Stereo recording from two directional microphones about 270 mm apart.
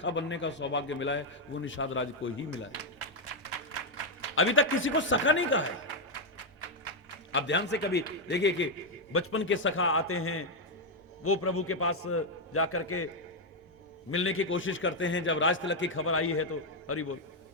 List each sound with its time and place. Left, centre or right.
0.0 s a man's voice: left
4.4 s a man's voice: left
7.3 s a man's voice: left
14.1 s a man's voice: left